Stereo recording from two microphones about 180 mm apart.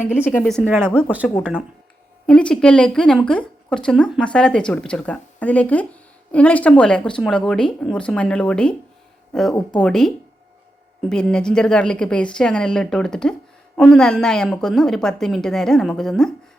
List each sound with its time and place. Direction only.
0.3 s speech: 5° left (ahead or behind)
2.2 s speech: 5° left (ahead or behind)
11.1 s speech: 5° left (ahead or behind)